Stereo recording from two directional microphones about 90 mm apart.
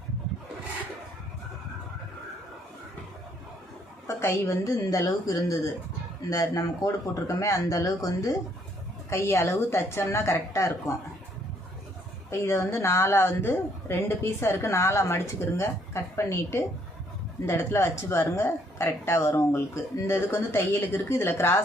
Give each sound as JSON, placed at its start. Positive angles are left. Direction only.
{"t": 4.0, "sound": "speech", "side_deg": 35}
{"t": 12.3, "sound": "a woman's voice", "side_deg": 30}